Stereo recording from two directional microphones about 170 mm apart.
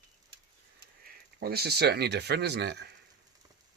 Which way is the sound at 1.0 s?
65° right (ahead or behind).